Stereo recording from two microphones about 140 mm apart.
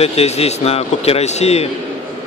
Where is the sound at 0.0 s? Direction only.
45° left (ahead or behind).